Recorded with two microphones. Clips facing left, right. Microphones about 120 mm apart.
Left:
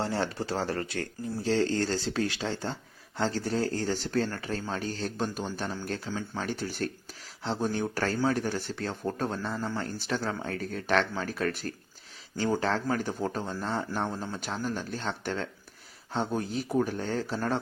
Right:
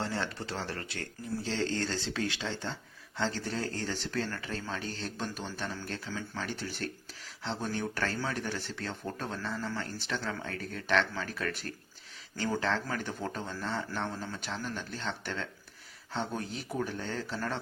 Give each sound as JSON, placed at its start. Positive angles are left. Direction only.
{"t": 0.0, "sound": "speech", "side_deg": 30}